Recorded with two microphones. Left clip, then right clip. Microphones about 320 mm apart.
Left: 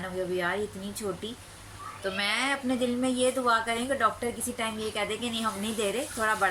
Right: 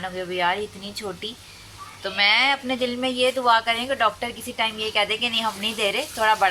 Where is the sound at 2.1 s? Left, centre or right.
Centre.